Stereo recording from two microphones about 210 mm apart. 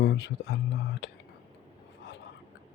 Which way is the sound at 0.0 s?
50° left (ahead or behind).